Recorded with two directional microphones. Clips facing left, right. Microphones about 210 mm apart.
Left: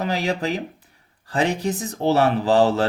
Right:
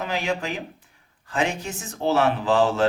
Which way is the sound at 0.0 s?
35° left (ahead or behind).